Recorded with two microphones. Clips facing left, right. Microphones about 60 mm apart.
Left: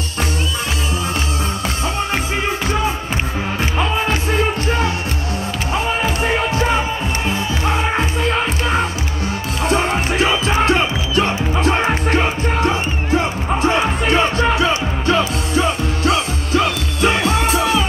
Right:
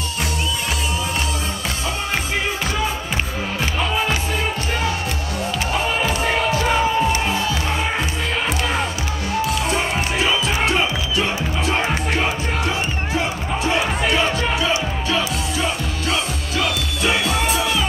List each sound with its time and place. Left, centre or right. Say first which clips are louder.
9.7 s music: left 4 dB; left
13.6 s music: left 3 dB; left